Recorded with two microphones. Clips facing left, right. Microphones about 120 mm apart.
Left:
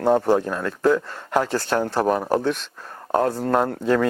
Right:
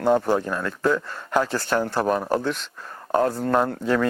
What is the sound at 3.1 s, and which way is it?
Speech, 30° left (ahead or behind).